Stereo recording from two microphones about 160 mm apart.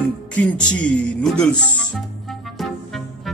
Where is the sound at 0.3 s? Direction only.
10° left (ahead or behind).